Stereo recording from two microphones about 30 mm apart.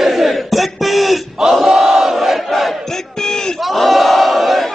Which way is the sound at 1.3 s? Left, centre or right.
Centre.